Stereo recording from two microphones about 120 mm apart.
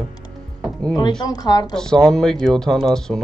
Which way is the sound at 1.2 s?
35° left (ahead or behind).